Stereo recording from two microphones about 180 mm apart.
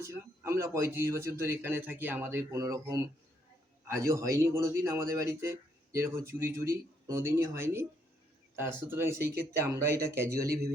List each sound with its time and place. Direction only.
0.0 s a man's voice: 15° right (ahead or behind)